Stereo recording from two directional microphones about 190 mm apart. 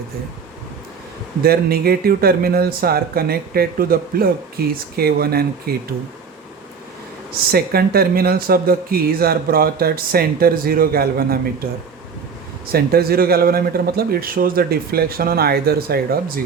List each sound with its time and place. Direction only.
1.4 s speech: 55° right (ahead or behind)
7.5 s speech: 55° right (ahead or behind)
12.7 s speech: 55° right (ahead or behind)